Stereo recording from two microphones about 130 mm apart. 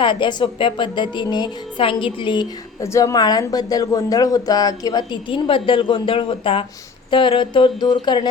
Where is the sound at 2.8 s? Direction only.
25° left (ahead or behind).